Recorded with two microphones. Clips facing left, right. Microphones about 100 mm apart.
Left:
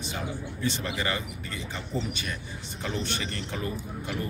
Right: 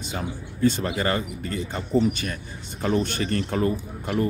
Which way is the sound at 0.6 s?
45° right (ahead or behind).